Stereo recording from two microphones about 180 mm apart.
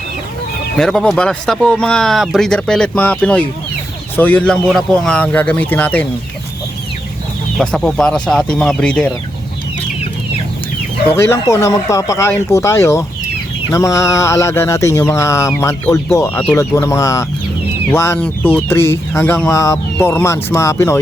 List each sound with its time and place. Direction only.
0.8 s speech: centre (ahead or behind)
7.6 s speech: 5° left (ahead or behind)
11.1 s speech: 15° left (ahead or behind)